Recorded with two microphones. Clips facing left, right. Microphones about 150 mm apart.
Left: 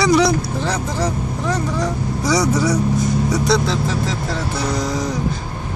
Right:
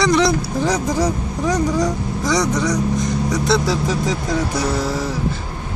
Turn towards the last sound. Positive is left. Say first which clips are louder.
# even
turn(degrees=-5)  # may be behind; listen again after turning